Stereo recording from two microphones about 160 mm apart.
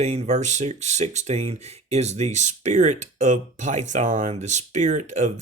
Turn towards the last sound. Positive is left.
turn(degrees=-50)  # may be behind; listen again after turning